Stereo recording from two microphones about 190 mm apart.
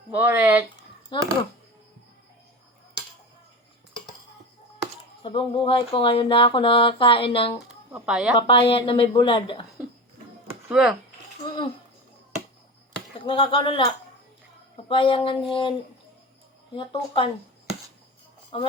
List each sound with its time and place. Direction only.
0.1 s speech: 10° right (ahead or behind)
1.1 s speech: 25° left (ahead or behind)
5.2 s speech: 25° left (ahead or behind)
7.6 s speech: 5° right (ahead or behind)
8.4 s speech: 25° left (ahead or behind)
10.5 s a sound: 5° right (ahead or behind)
11.4 s a sound: 25° left (ahead or behind)
13.1 s speech: 30° left (ahead or behind)
16.7 s speech: 25° left (ahead or behind)
18.5 s speech: 30° left (ahead or behind)